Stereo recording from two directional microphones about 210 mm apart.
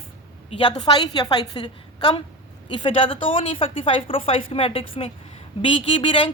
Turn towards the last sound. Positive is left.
turn(degrees=25)  # may be behind; listen again after turning